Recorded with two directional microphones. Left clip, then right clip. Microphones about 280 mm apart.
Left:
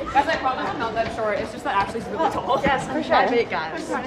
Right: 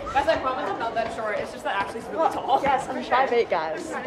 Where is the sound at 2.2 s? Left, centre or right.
Centre.